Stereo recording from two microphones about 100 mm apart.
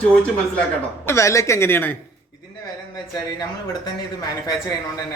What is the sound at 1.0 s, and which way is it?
Speech, 30° left (ahead or behind).